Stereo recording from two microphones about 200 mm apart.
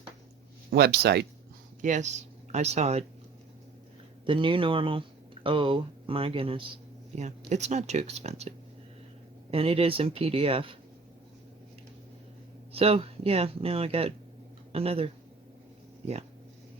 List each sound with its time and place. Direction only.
0.7 s speech: 50° right (ahead or behind)
1.8 s speech: 35° right (ahead or behind)
4.3 s speech: 25° right (ahead or behind)
12.7 s speech: 30° right (ahead or behind)